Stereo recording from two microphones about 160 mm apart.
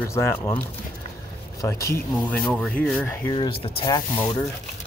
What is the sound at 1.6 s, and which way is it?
Speech, 20° left (ahead or behind).